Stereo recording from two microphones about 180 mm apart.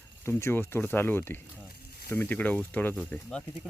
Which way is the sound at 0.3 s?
15° left (ahead or behind).